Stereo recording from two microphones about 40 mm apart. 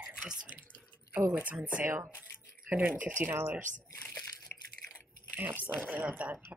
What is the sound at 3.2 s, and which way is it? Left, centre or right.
Speech, right.